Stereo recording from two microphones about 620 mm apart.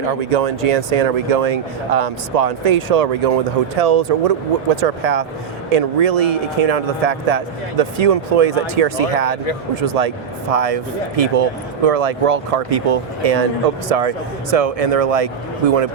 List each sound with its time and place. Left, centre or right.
0.1 s speech: right